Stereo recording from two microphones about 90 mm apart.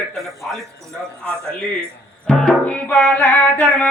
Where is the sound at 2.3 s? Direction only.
5° left (ahead or behind).